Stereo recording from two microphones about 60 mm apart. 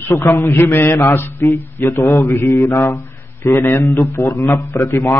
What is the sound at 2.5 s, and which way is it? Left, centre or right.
Mantra, left.